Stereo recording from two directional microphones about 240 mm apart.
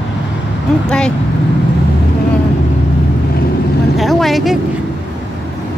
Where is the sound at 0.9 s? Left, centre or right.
Centre.